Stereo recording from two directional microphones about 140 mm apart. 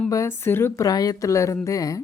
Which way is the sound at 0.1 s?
20° left (ahead or behind).